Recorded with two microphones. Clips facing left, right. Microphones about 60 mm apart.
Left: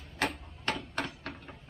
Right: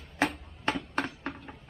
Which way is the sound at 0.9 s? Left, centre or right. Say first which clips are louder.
Right 4 dB; right.